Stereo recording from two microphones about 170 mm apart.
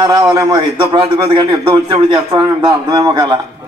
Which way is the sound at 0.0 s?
20° right (ahead or behind).